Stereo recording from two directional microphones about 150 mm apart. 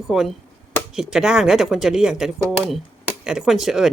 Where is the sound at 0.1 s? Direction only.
Centre (ahead or behind).